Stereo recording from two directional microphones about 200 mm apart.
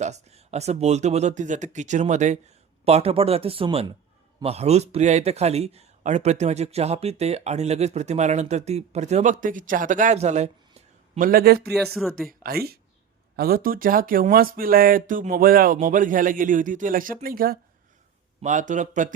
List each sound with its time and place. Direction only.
0.0 s speech: 35° right (ahead or behind)
11.3 s speech: 50° right (ahead or behind)
11.9 s speech: centre (ahead or behind)
12.3 s speech: 50° right (ahead or behind)